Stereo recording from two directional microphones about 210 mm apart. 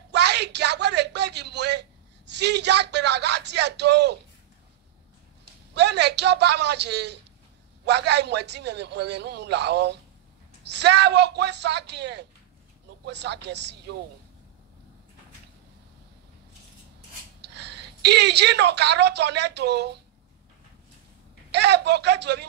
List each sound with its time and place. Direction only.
0.1 s a sound: 55° right (ahead or behind)
5.8 s a man's voice: 55° right (ahead or behind)
17.4 s a woman's voice: 55° right (ahead or behind)
21.5 s a man's voice: 55° right (ahead or behind)